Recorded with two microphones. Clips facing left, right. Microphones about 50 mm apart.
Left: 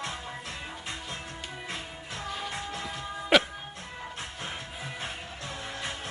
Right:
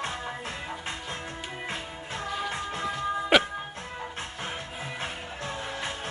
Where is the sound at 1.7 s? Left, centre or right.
Right.